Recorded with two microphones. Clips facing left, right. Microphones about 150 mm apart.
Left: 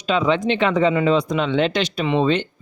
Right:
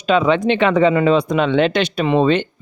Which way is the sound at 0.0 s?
60° right (ahead or behind).